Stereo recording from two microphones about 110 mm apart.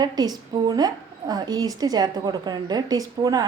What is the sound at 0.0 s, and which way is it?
A woman's voice, 35° right (ahead or behind).